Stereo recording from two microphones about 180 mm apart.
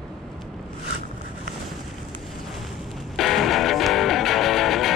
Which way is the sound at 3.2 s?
Centre (ahead or behind).